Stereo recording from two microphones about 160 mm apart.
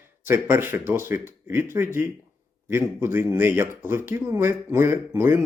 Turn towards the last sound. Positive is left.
turn(degrees=-15)  # may be behind; listen again after turning